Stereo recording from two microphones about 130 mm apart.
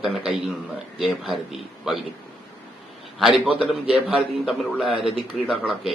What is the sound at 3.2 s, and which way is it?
A man's voice, centre (ahead or behind).